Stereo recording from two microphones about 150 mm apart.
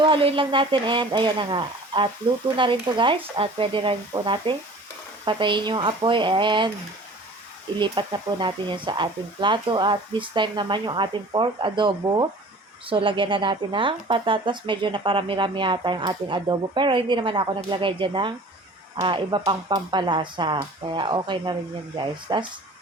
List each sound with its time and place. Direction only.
0.0 s speech: 35° right (ahead or behind)
7.8 s speech: 30° right (ahead or behind)